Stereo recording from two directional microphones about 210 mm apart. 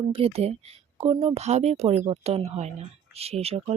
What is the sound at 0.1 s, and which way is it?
Speech, 30° right (ahead or behind).